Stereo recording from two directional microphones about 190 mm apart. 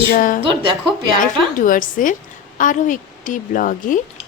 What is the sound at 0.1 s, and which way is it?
Speech, 45° left (ahead or behind).